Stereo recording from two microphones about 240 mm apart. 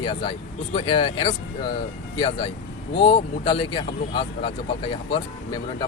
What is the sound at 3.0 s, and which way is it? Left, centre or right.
Speech, left.